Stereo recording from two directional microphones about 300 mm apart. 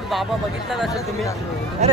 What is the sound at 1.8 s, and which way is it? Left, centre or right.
Speech, right.